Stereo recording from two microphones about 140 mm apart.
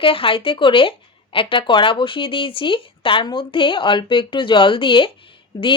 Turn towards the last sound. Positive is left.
turn(degrees=35)  # may be behind; listen again after turning